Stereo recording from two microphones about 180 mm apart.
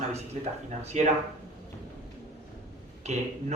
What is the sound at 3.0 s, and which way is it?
Speech, 40° right (ahead or behind).